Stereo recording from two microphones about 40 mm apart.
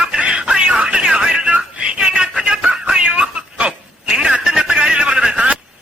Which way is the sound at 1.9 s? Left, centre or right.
Right.